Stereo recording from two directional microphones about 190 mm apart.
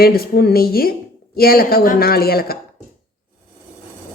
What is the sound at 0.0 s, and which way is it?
Speech, 55° left (ahead or behind).